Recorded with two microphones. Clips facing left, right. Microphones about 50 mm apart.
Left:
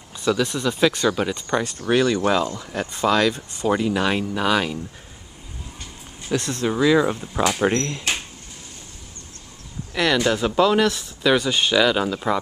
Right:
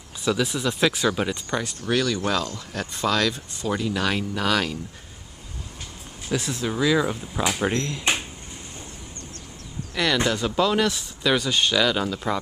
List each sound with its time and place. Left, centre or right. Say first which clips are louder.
0.2 s speech: left 2 dB; centre
1.9 s speech: left 5 dB; left
6.2 s speech: left 3 dB; centre
6.7 s speech: left 4 dB; centre
10.2 s speech: left 4 dB; centre